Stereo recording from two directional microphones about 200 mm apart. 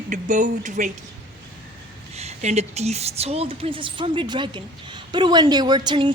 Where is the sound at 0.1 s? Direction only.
40° right (ahead or behind).